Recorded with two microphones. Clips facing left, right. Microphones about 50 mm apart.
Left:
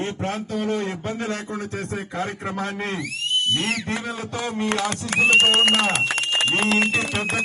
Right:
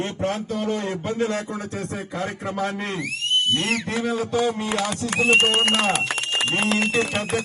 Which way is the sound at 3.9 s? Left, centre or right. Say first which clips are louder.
Right 5 dB; left.